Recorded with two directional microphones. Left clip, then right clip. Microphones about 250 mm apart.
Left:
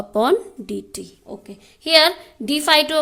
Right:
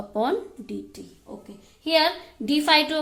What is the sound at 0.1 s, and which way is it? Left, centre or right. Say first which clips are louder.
A woman's voice: left 7 dB; left.